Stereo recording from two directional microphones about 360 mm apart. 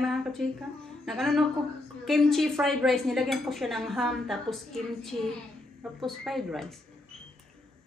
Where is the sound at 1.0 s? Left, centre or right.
Centre.